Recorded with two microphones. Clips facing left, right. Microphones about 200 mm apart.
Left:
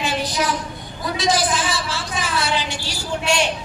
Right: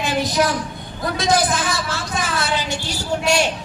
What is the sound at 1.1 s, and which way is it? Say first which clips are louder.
Speech: right 2 dB; 55° right (ahead or behind).